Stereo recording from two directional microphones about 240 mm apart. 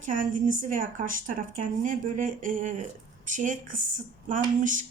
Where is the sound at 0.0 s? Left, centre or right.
Right.